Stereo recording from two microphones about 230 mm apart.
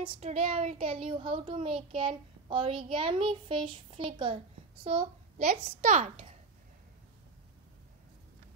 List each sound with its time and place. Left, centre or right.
0.0 s speech: right